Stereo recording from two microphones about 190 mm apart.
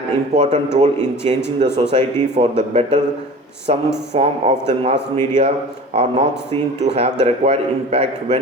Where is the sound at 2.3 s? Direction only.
35° right (ahead or behind).